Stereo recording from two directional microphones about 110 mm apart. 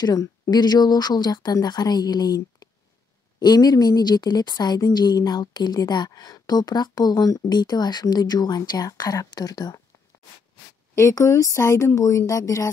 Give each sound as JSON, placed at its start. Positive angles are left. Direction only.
{"t": 0.0, "sound": "a woman's voice", "side_deg": 35}
{"t": 11.0, "sound": "speech", "side_deg": 25}